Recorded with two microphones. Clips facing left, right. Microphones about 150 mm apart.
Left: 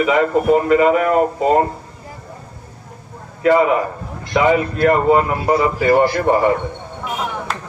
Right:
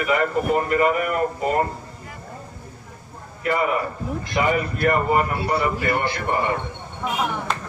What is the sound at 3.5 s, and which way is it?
A man's voice, 90° left.